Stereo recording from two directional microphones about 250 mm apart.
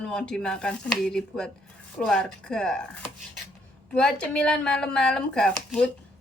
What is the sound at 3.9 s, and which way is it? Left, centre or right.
A woman's voice, centre.